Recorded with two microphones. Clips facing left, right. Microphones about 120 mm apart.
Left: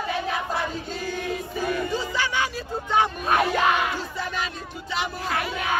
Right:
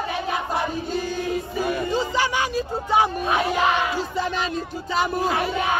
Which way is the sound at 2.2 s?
15° right (ahead or behind).